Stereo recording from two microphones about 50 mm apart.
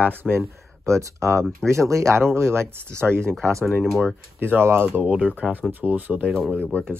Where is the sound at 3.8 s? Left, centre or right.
Centre.